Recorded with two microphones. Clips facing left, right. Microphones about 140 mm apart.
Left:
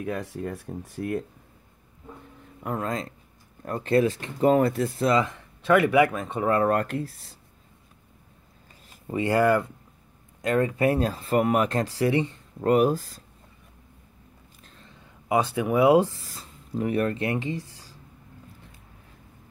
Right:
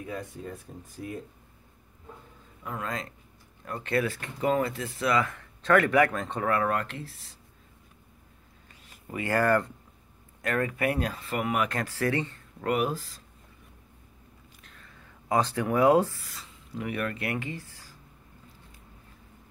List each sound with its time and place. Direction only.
0.0 s speech: 75° left (ahead or behind)
2.6 s speech: 40° left (ahead or behind)
5.0 s speech: 25° left (ahead or behind); by 6.4 s 5° left (ahead or behind)
6.4 s speech: 30° left (ahead or behind)
6.7 s speech: 45° left (ahead or behind)
9.0 s speech: 25° left (ahead or behind)
11.8 s speech: 15° left (ahead or behind)
12.6 s speech: 40° left (ahead or behind)
14.6 s a sound: 30° left (ahead or behind)
15.2 s speech: 10° left (ahead or behind)
16.2 s speech: 35° left (ahead or behind)